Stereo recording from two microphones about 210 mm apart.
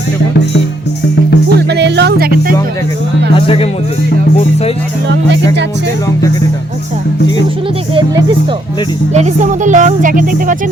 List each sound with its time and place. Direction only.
1.5 s music: 55° right (ahead or behind)
3.3 s music: 25° left (ahead or behind)
7.9 s speech: 20° right (ahead or behind)
9.1 s speech: 35° right (ahead or behind)